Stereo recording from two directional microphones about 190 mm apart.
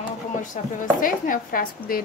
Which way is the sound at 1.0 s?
45° left (ahead or behind).